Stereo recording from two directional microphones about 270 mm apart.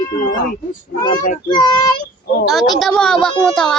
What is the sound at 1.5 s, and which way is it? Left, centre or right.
Siren, centre.